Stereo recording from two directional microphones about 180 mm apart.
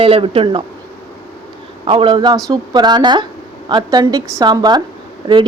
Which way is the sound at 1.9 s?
30° right (ahead or behind).